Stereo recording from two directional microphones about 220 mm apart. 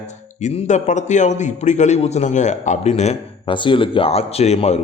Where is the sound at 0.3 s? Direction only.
30° left (ahead or behind).